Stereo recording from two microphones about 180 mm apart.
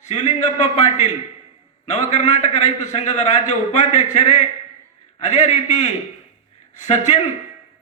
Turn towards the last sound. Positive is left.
turn(degrees=40)  # may be behind; listen again after turning